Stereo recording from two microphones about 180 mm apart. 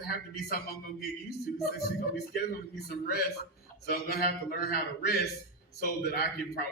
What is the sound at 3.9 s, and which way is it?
A man's voice, 60° left (ahead or behind).